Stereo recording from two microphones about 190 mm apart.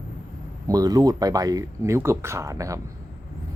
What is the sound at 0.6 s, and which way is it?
Speech, 20° right (ahead or behind).